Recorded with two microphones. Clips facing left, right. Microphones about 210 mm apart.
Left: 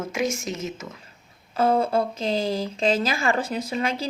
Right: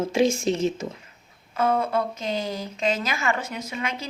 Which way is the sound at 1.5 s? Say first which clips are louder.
Left 2 dB; 30° left (ahead or behind).